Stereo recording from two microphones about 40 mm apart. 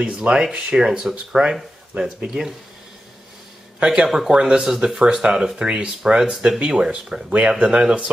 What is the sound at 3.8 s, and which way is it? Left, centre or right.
Speech, centre.